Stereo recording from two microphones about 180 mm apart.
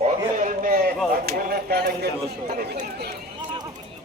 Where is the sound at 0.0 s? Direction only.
45° right (ahead or behind).